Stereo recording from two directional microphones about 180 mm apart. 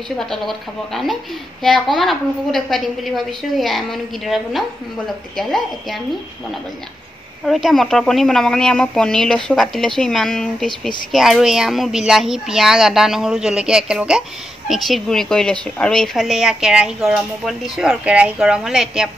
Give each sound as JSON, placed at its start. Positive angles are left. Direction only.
{"t": 0.2, "sound": "speech", "side_deg": 0}
{"t": 7.4, "sound": "speech", "side_deg": 0}